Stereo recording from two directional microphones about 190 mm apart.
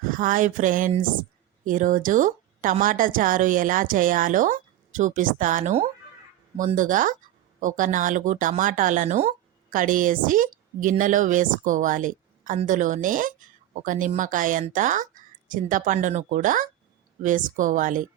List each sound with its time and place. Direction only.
0.0 s speech: 45° right (ahead or behind)